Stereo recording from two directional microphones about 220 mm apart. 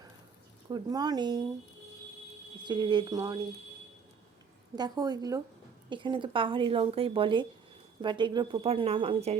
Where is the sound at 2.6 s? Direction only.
20° right (ahead or behind).